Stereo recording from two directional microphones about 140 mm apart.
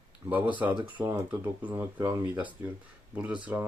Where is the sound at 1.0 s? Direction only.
15° right (ahead or behind).